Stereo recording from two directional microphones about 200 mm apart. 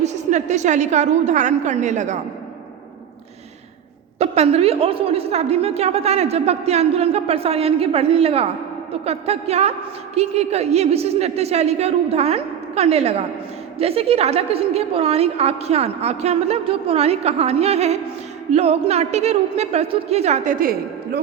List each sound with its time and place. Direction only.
0.0 s a woman's voice: 35° right (ahead or behind)
4.2 s a woman's voice: 30° right (ahead or behind); by 21.2 s 45° right (ahead or behind)